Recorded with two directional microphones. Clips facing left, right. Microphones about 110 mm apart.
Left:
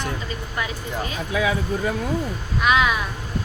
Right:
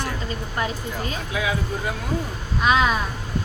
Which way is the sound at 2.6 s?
35° right (ahead or behind).